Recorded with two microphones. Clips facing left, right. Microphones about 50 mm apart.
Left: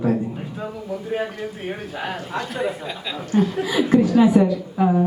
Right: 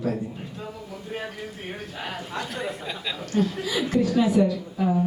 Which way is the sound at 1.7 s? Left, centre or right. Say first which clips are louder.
Left 6 dB; centre.